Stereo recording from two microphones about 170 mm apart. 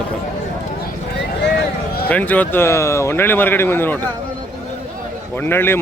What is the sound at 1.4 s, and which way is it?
Vehicle, 80° left.